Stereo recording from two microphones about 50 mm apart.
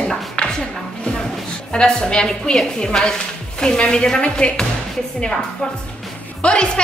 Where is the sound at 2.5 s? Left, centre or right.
Centre.